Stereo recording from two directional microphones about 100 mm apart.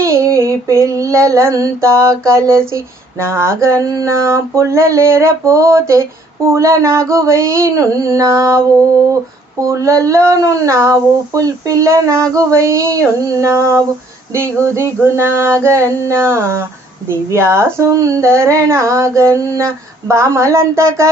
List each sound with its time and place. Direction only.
0.0 s female singing: 25° right (ahead or behind)
9.6 s speech: 30° right (ahead or behind)
14.3 s female singing: 25° right (ahead or behind)